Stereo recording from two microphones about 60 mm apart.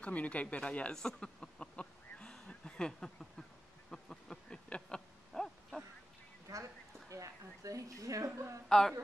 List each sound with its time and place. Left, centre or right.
0.0 s speech: left
3.9 s a sound: centre
4.6 s owl: centre
6.5 s a woman's voice: right
8.6 s speech: centre